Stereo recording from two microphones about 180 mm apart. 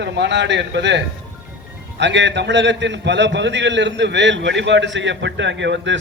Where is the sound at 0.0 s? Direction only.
75° right (ahead or behind).